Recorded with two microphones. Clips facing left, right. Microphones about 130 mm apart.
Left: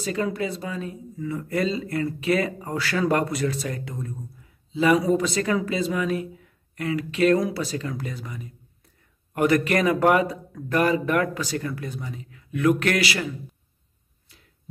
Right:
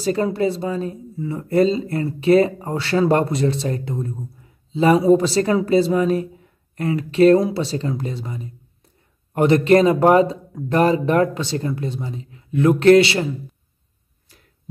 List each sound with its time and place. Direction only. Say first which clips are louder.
0.0 s speech: right 7 dB; 35° right (ahead or behind)